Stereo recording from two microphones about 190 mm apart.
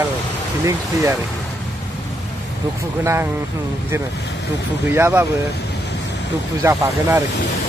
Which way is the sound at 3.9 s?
15° right (ahead or behind).